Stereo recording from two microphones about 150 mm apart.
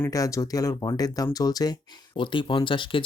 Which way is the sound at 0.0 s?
20° left (ahead or behind).